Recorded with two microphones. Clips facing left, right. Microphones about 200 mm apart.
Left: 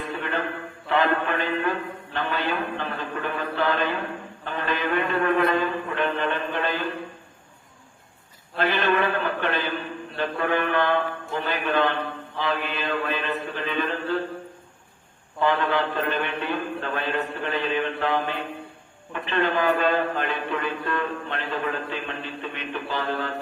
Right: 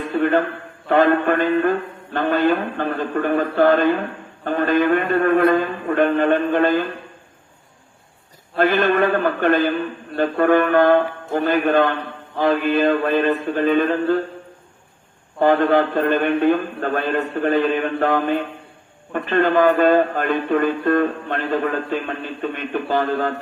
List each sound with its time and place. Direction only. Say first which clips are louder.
0.0 s a sound: right 11 dB; 50° right (ahead or behind)
0.9 s speech: right 8 dB; 50° right (ahead or behind)
8.5 s speech: right 6 dB; 50° right (ahead or behind)
15.4 s speech: right 8 dB; 50° right (ahead or behind)